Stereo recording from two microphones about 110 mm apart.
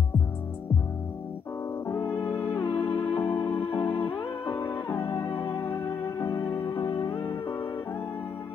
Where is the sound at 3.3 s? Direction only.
30° left (ahead or behind).